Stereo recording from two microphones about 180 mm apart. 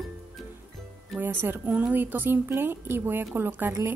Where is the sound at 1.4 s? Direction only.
10° right (ahead or behind).